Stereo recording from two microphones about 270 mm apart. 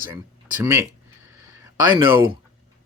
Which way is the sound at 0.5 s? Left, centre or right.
Centre.